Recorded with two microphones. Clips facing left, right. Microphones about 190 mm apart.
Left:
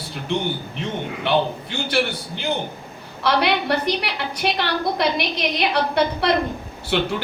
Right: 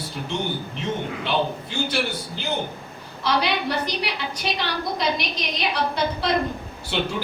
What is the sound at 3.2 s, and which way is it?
A woman's voice, 60° left (ahead or behind).